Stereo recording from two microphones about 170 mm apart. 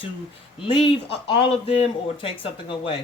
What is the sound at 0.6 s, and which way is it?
Speech, 30° left (ahead or behind).